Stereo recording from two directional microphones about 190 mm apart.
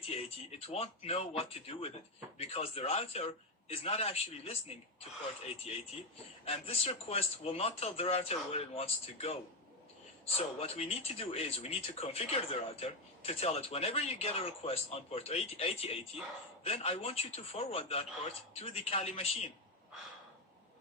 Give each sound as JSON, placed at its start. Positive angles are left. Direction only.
{"t": 0.1, "sound": "speech", "side_deg": 35}
{"t": 5.7, "sound": "speech", "side_deg": 35}
{"t": 10.3, "sound": "speech", "side_deg": 30}